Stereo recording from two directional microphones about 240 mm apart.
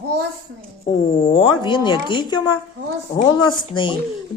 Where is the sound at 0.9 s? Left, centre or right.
Left.